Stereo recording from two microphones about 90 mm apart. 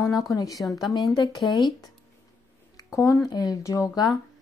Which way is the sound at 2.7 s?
35° left (ahead or behind).